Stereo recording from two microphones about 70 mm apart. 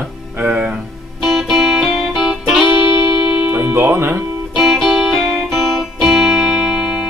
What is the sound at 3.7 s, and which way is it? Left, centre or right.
Speech, right.